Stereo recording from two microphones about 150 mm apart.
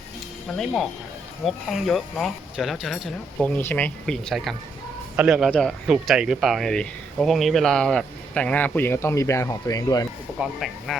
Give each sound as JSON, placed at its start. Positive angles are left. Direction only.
{"t": 0.5, "sound": "speech", "side_deg": 0}
{"t": 3.4, "sound": "speech", "side_deg": 10}
{"t": 10.3, "sound": "speech", "side_deg": 0}